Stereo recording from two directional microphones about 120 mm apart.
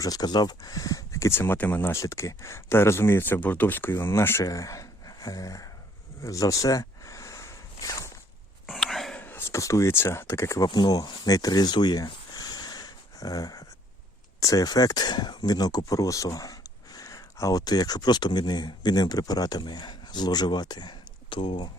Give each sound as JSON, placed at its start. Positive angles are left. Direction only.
{"t": 0.0, "sound": "speech", "side_deg": 30}
{"t": 6.2, "sound": "a sound", "side_deg": 25}
{"t": 8.6, "sound": "whispering", "side_deg": 0}
{"t": 9.1, "sound": "speech", "side_deg": 15}
{"t": 10.7, "sound": "a sound", "side_deg": 35}
{"t": 14.4, "sound": "speech", "side_deg": 30}